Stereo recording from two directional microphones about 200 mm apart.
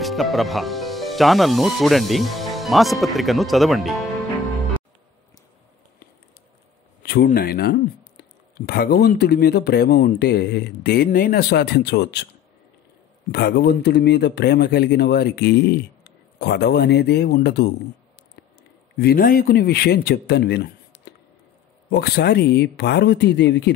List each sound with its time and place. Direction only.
0.0 s speech: centre (ahead or behind)
7.0 s a sound: 55° left (ahead or behind)
7.2 s speech: 50° left (ahead or behind)
13.3 s speech: 50° left (ahead or behind)
18.9 s speech: 50° left (ahead or behind)